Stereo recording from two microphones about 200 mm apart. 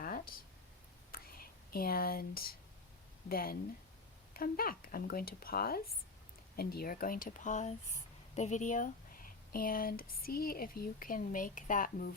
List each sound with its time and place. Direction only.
0.0 s a sound: 45° left (ahead or behind)
1.1 s whispering: 50° left (ahead or behind)
3.2 s speech: 50° left (ahead or behind)